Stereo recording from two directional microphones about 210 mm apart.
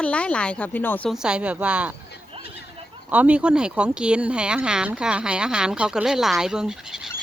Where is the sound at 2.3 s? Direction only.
25° right (ahead or behind).